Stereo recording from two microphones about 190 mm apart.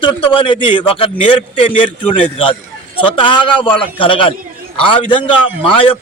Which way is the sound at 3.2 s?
25° left (ahead or behind).